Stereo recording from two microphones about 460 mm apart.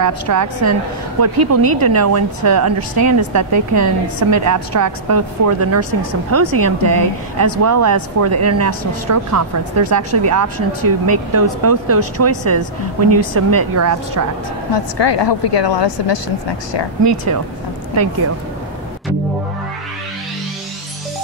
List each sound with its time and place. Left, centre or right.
0.0 s speech: right
14.7 s speech: left